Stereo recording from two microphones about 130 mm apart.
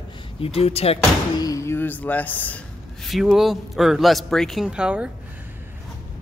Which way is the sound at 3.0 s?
Centre (ahead or behind).